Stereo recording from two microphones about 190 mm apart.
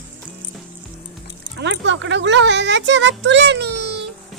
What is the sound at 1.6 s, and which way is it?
Speech, 70° right (ahead or behind).